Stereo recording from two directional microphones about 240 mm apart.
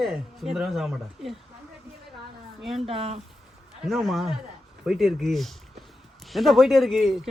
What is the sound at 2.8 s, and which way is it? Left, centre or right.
Speech, right.